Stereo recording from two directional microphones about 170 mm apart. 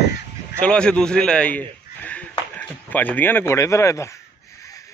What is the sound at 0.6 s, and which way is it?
A man's voice, 5° left (ahead or behind).